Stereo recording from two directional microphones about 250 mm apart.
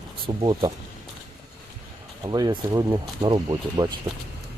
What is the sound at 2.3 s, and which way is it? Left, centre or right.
Speech, centre.